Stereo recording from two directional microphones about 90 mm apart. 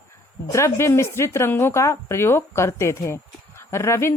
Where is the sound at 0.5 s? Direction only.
35° left (ahead or behind).